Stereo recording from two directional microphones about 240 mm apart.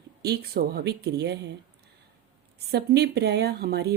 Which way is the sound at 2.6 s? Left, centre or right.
Right.